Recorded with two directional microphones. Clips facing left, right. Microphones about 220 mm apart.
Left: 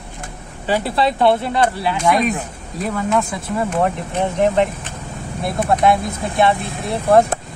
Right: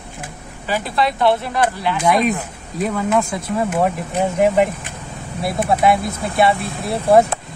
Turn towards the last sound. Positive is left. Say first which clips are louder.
# right 1 dB
turn(degrees=0)  # may be behind; listen again after turning